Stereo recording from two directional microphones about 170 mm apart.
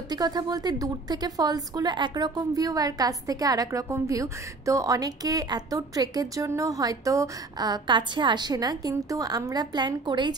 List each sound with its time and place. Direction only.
0.1 s a woman's voice: 25° right (ahead or behind)